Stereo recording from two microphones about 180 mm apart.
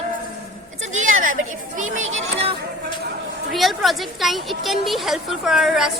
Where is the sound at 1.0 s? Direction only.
45° right (ahead or behind).